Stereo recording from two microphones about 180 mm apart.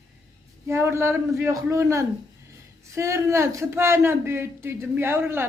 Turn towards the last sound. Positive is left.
turn(degrees=-15)  # may be behind; listen again after turning